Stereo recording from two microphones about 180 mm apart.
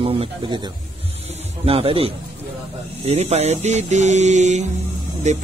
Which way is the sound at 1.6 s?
30° right (ahead or behind).